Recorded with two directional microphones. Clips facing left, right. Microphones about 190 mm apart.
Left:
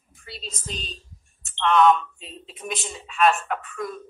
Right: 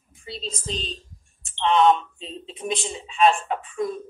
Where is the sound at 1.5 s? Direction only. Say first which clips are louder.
Even; 25° right (ahead or behind).